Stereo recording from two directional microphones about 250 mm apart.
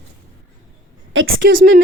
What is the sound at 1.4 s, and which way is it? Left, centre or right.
Speech, right.